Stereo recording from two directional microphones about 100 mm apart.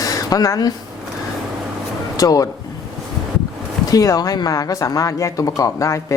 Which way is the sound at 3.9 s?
40° left (ahead or behind).